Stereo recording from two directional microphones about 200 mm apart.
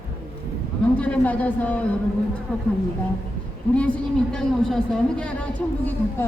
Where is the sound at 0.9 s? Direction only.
5° left (ahead or behind).